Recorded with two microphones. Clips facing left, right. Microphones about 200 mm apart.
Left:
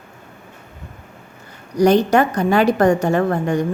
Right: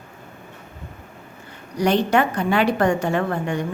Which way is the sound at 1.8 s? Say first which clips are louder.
Left 5 dB; 40° left (ahead or behind).